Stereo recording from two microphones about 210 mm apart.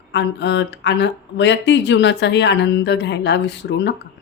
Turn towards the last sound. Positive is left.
turn(degrees=55)  # may be behind; listen again after turning